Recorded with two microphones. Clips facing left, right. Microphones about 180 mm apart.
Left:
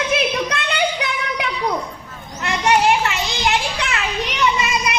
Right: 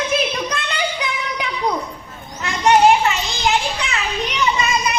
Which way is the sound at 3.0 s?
65° left (ahead or behind).